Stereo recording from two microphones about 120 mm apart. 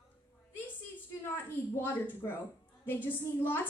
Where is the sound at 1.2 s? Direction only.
15° left (ahead or behind).